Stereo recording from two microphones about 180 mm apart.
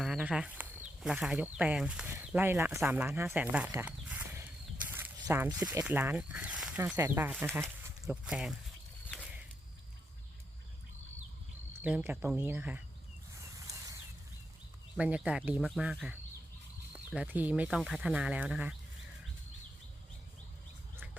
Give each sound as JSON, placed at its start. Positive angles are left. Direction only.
{"t": 0.0, "sound": "speech", "side_deg": -5}
{"t": 3.7, "sound": "a sound", "side_deg": -10}
{"t": 5.2, "sound": "speech", "side_deg": -15}
{"t": 6.7, "sound": "speech", "side_deg": -15}
{"t": 11.7, "sound": "speech", "side_deg": -5}
{"t": 13.7, "sound": "a sound", "side_deg": -20}
{"t": 14.9, "sound": "speech", "side_deg": -5}